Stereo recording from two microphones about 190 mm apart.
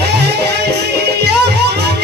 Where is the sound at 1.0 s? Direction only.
60° right (ahead or behind).